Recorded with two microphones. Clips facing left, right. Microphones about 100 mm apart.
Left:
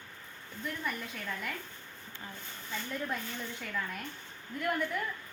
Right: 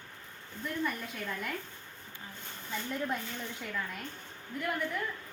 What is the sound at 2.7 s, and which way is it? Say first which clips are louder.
Speech: right 2 dB; 10° right (ahead or behind).